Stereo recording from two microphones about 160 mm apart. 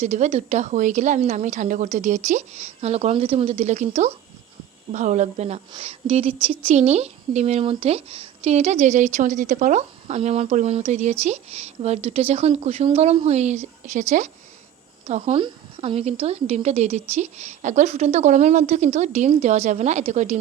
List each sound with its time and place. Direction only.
0.0 s a woman's voice: 45° right (ahead or behind)